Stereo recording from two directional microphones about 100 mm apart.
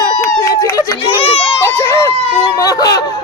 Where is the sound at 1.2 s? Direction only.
70° left (ahead or behind).